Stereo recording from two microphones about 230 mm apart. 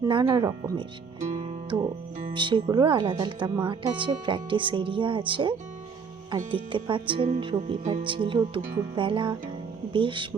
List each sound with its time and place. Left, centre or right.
0.1 s speech: centre
1.2 s music: right
2.3 s speech: right